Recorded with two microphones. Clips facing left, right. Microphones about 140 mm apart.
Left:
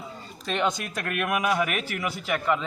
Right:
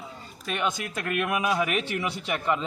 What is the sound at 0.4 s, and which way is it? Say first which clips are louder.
Speech: left 3 dB; 10° right (ahead or behind).